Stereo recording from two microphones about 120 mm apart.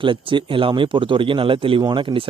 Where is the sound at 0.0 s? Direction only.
45° right (ahead or behind).